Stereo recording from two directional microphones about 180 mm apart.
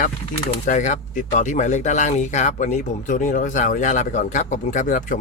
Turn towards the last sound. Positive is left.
turn(degrees=45)  # may be behind; listen again after turning